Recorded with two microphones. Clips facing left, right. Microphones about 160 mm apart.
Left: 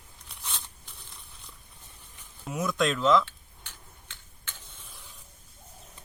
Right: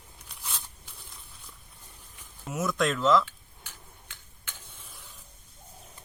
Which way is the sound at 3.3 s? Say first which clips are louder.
Right 1 dB; 10° right (ahead or behind).